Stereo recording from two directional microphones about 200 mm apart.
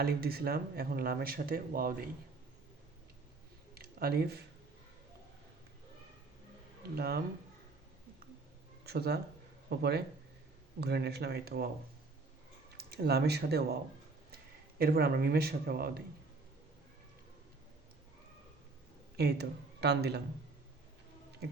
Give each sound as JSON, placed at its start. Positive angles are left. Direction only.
{"t": 0.0, "sound": "speech", "side_deg": -50}
{"t": 3.8, "sound": "a sound", "side_deg": -50}
{"t": 6.9, "sound": "speech", "side_deg": -50}
{"t": 8.8, "sound": "speech", "side_deg": -55}
{"t": 12.7, "sound": "speech", "side_deg": -50}
{"t": 14.8, "sound": "speech", "side_deg": -50}
{"t": 19.1, "sound": "speech", "side_deg": -55}